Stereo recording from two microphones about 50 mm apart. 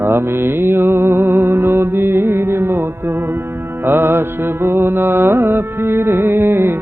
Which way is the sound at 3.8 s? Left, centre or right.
Right.